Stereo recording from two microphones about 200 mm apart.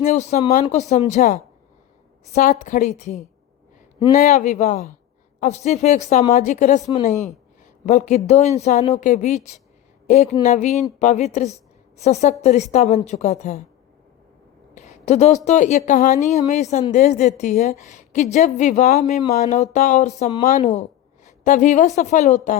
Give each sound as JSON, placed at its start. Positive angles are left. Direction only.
{"t": 0.0, "sound": "a woman's voice", "side_deg": 35}
{"t": 4.2, "sound": "a woman's voice", "side_deg": 35}
{"t": 7.9, "sound": "a woman's voice", "side_deg": 35}
{"t": 14.8, "sound": "a sound", "side_deg": 35}
{"t": 15.4, "sound": "a woman's voice", "side_deg": 35}